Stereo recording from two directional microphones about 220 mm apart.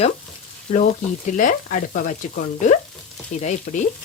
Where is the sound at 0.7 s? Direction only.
35° left (ahead or behind).